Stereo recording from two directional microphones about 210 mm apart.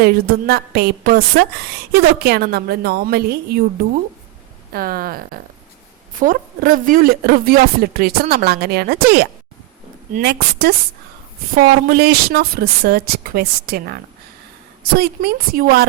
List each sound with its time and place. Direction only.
0.0 s speech: 45° right (ahead or behind)
4.7 s speech: 45° right (ahead or behind)